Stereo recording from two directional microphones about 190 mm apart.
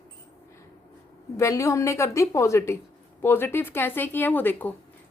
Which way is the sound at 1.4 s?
15° left (ahead or behind).